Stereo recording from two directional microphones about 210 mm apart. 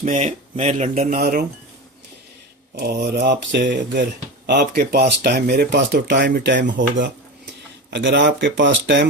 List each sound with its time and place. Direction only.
0.0 s speech: 35° right (ahead or behind)
2.7 s speech: 45° right (ahead or behind)
7.9 s speech: 55° right (ahead or behind)